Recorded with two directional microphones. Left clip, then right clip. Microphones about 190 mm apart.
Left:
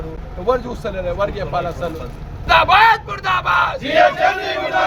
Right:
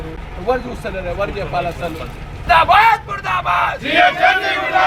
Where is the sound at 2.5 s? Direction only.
20° left (ahead or behind).